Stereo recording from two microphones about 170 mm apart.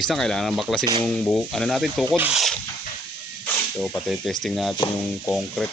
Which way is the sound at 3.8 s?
Centre (ahead or behind).